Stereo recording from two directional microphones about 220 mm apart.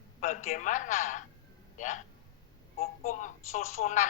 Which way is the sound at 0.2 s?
35° left (ahead or behind).